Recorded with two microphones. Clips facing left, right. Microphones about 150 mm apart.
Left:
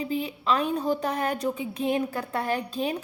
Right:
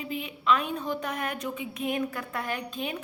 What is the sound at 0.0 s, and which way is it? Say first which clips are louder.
A woman's voice: left 4 dB; 35° left (ahead or behind).